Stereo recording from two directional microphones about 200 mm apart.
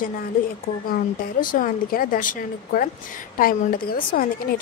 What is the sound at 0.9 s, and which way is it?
A woman's voice, 45° left (ahead or behind).